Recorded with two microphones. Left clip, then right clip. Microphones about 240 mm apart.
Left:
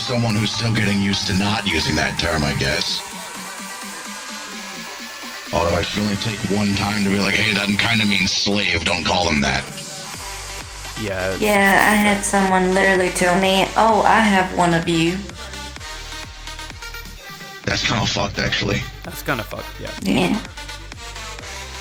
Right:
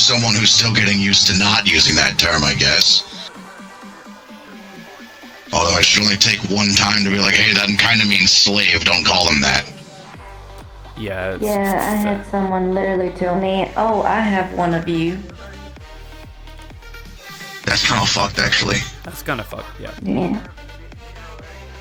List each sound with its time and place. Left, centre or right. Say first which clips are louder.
0.0 s speech: right 8 dB; right
5.5 s speech: right 6 dB; right
6.6 s a man's voice: right 8 dB; right
7.0 s speech: right 5 dB; centre
11.0 s speech: even; centre
11.3 s speech: left 6 dB; left
17.7 s speech: right 4 dB; right
19.2 s speech: even; centre
20.1 s speech: left 2 dB; left